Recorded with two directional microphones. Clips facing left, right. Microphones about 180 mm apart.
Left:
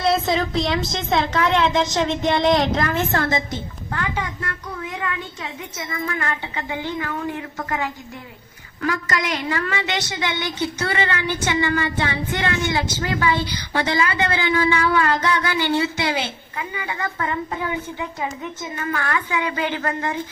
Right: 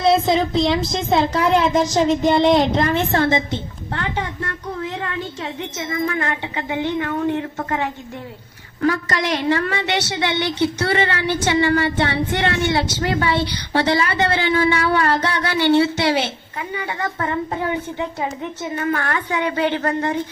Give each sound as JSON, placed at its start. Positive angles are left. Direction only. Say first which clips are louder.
{"t": 0.0, "sound": "speech", "louder": "right 4 dB", "side_deg": 0}
{"t": 0.9, "sound": "a woman's voice", "louder": "right 3 dB", "side_deg": -30}
{"t": 2.3, "sound": "speech", "louder": "right 2 dB", "side_deg": 0}
{"t": 2.7, "sound": "a woman's voice", "louder": "right 3 dB", "side_deg": -30}
{"t": 6.3, "sound": "a woman's voice", "louder": "right 4 dB", "side_deg": -20}